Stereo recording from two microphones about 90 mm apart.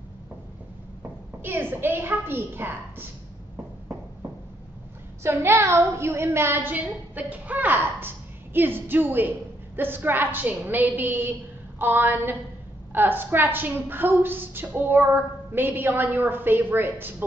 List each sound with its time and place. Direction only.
1.4 s a woman's voice: 25° right (ahead or behind)
5.2 s a woman's voice: 30° right (ahead or behind)